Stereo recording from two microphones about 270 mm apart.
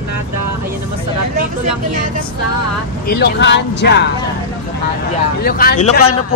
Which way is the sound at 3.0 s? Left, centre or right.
Left.